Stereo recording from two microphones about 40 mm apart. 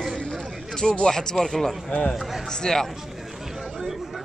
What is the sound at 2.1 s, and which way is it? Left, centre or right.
Speech, centre.